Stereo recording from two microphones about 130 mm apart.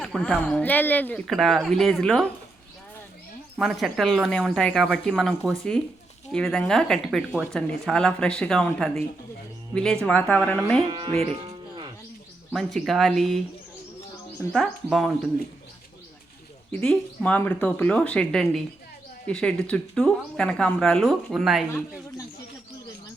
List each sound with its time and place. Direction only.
0.0 s speech: 5° left (ahead or behind)
1.3 s speech: centre (ahead or behind)
3.6 s speech: centre (ahead or behind)
10.8 s speech: 35° right (ahead or behind)
11.2 s music: 50° right (ahead or behind)
12.5 s speech: 5° left (ahead or behind)
14.5 s speech: centre (ahead or behind)
16.8 s speech: 10° left (ahead or behind)